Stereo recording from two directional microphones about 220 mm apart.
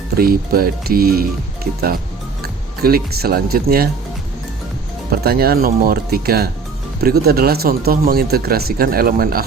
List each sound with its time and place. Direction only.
0.2 s speech: 40° right (ahead or behind)
2.4 s speech: 45° right (ahead or behind)
5.1 s speech: 45° right (ahead or behind)